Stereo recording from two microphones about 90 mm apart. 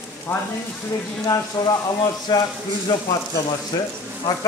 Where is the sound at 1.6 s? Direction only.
30° left (ahead or behind).